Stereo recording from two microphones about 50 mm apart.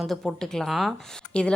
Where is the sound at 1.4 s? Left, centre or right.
Left.